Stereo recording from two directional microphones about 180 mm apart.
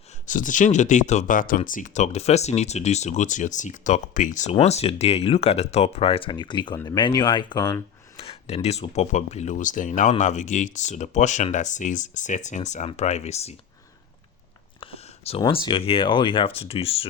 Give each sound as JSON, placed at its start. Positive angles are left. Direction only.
{"t": 0.3, "sound": "speech", "side_deg": 45}
{"t": 14.8, "sound": "a sound", "side_deg": 30}
{"t": 15.4, "sound": "speech", "side_deg": 25}